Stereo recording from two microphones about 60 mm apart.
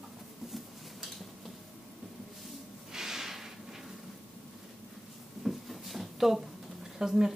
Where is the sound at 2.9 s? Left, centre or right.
Centre.